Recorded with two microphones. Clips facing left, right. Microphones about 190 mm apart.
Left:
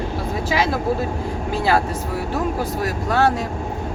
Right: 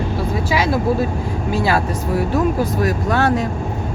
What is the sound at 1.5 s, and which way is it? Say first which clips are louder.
Speech: right 1 dB; 10° right (ahead or behind).